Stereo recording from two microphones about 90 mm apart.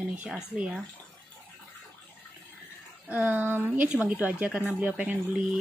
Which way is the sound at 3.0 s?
15° right (ahead or behind).